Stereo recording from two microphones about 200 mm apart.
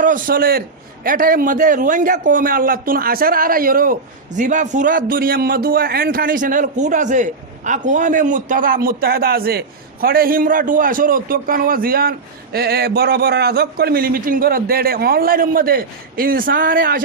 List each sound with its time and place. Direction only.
0.0 s a man's voice: 45° right (ahead or behind)